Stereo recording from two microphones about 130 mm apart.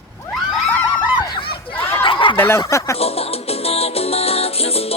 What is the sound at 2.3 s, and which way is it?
Speech, 20° left (ahead or behind).